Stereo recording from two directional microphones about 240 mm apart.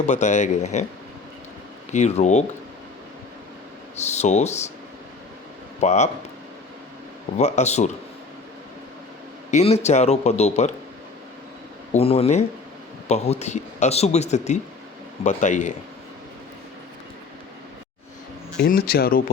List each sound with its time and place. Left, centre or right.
0.1 s speech: left
1.9 s speech: left
3.9 s speech: left
5.8 s speech: left
7.3 s speech: left
9.5 s speech: left
11.9 s speech: left
18.6 s speech: left